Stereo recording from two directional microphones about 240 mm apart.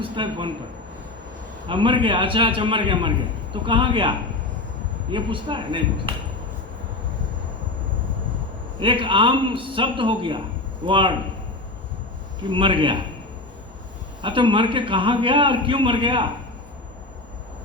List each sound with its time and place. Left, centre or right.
0.0 s a man's voice: right
1.6 s a man's voice: right
5.1 s a man's voice: right
8.8 s a man's voice: right
12.5 s a man's voice: right
14.2 s a man's voice: right